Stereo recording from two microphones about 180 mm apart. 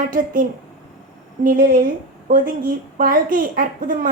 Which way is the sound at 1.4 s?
55° right (ahead or behind).